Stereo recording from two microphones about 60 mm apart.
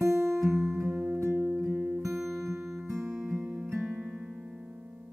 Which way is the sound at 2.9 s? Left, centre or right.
Right.